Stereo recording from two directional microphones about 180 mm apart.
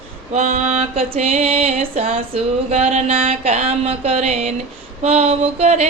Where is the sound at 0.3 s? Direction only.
40° right (ahead or behind).